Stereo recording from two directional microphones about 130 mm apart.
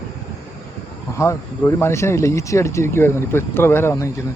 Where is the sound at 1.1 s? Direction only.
20° left (ahead or behind).